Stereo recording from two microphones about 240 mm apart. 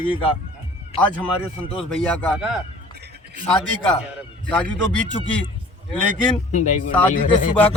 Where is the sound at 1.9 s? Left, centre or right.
Centre.